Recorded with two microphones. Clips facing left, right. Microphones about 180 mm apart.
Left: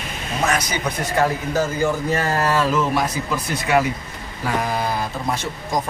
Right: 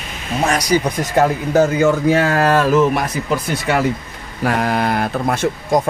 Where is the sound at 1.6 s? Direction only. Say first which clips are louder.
Right 8 dB; 80° right.